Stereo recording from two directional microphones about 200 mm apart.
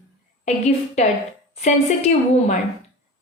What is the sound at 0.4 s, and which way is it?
A woman's voice, 35° left (ahead or behind).